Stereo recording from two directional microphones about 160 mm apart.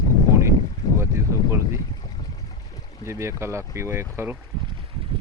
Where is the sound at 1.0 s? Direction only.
15° right (ahead or behind).